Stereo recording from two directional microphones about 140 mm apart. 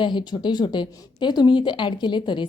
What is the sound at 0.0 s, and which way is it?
A woman's voice, 35° left (ahead or behind).